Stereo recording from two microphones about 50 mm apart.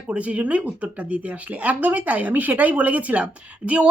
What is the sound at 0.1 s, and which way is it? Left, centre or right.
A woman's voice, right.